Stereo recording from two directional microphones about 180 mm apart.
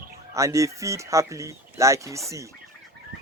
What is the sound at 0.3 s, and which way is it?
Speech, 15° right (ahead or behind).